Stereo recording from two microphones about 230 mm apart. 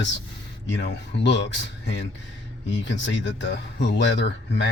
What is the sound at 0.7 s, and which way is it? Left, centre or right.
Speech, left.